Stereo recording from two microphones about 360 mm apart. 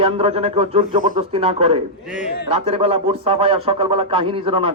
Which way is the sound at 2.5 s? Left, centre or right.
Centre.